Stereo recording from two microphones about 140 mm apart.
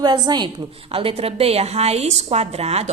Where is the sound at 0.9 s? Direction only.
45° right (ahead or behind).